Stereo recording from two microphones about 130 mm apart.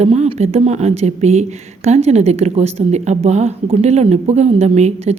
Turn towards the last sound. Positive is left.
turn(degrees=-60)  # may be behind; listen again after turning